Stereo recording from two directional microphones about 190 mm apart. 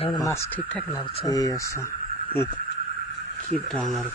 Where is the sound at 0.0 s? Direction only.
20° left (ahead or behind).